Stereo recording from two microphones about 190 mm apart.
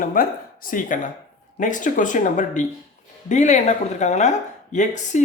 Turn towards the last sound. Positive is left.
turn(degrees=40)  # may be behind; listen again after turning